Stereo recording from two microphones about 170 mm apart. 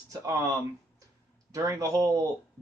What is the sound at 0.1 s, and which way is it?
Speech, 20° right (ahead or behind).